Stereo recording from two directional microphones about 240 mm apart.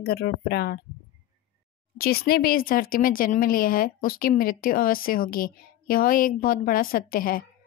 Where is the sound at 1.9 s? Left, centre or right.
Left.